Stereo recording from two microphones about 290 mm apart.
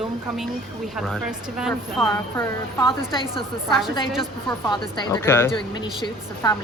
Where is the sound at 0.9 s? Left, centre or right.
Centre.